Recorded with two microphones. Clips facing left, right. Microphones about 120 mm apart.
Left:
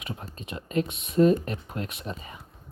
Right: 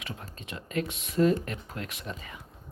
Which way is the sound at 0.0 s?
20° left (ahead or behind).